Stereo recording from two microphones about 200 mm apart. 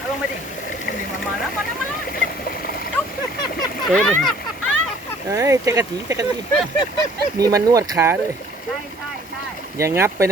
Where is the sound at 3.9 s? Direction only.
5° left (ahead or behind).